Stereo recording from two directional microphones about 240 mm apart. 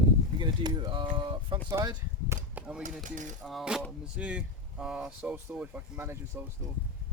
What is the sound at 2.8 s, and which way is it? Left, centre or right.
Cutlery, right.